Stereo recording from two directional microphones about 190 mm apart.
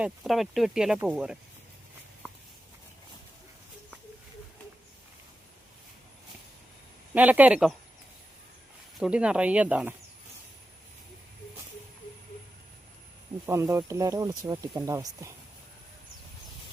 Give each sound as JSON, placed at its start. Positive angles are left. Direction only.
{"t": 0.0, "sound": "speech", "side_deg": 0}
{"t": 7.1, "sound": "speech", "side_deg": -10}
{"t": 9.0, "sound": "speech", "side_deg": -5}
{"t": 13.4, "sound": "speech", "side_deg": -15}